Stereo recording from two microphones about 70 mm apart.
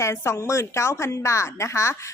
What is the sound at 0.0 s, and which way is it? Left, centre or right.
A woman's voice, left.